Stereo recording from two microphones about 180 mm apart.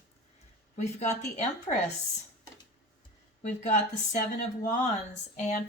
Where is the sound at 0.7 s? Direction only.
40° left (ahead or behind).